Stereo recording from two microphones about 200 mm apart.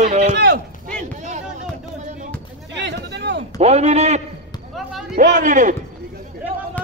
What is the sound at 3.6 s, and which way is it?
Speech, 35° right (ahead or behind).